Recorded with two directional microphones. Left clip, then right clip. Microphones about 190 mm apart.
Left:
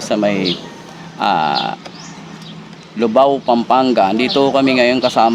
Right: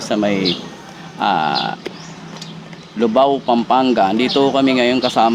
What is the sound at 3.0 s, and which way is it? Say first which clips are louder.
A man's voice: left 2 dB; 15° left (ahead or behind).